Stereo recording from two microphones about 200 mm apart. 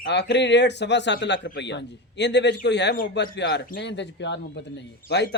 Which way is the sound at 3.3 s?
60° left (ahead or behind).